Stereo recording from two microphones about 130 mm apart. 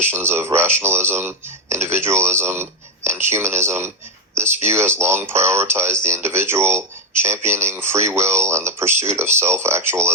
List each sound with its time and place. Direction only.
0.0 s speech: 20° right (ahead or behind)